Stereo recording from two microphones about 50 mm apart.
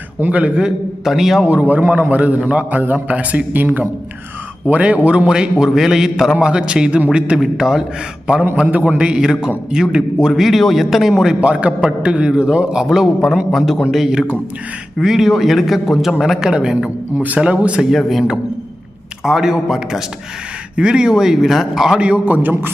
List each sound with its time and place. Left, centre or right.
0.3 s a man's voice: right
0.6 s a man's voice: centre
1.6 s a man's voice: right
4.7 s a man's voice: right; by 6.3 s centre
6.4 s a man's voice: centre
7.3 s a man's voice: centre
9.0 s a man's voice: centre
11.3 s a man's voice: right
12.9 s a man's voice: centre
15.0 s a man's voice: centre
17.2 s a man's voice: right
18.1 s a man's voice: centre
21.9 s a man's voice: right
22.2 s a man's voice: right